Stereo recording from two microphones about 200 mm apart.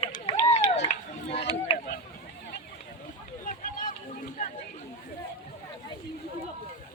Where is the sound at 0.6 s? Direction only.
35° left (ahead or behind).